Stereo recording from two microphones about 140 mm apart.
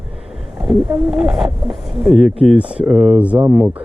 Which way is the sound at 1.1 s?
5° right (ahead or behind).